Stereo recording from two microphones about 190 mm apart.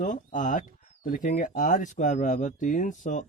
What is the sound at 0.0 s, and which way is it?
Speech, 40° left (ahead or behind).